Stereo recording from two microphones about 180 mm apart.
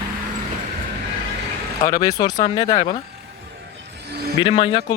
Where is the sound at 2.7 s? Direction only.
45° left (ahead or behind).